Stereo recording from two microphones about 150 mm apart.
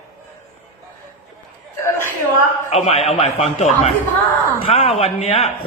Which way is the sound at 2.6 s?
45° left (ahead or behind).